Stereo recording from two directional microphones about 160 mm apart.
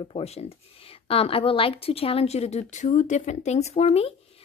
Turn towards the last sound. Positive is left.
turn(degrees=40)  # may be behind; listen again after turning